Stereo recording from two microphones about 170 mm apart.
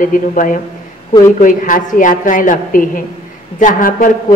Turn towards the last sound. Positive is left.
turn(degrees=55)  # may be behind; listen again after turning